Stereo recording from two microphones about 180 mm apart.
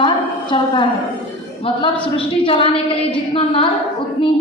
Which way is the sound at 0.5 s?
25° left (ahead or behind).